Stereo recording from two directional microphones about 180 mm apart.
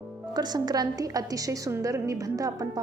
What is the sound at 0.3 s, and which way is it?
A woman's voice, 20° right (ahead or behind).